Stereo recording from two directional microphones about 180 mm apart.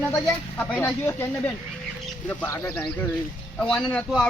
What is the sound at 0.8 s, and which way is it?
Speech, 10° left (ahead or behind).